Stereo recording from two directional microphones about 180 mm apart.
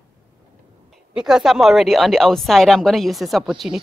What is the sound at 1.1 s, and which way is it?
A woman's voice, 5° right (ahead or behind).